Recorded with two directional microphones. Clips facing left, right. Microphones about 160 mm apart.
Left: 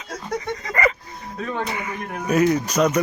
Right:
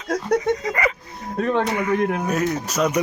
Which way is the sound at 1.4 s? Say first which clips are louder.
Right 6 dB; 65° right (ahead or behind).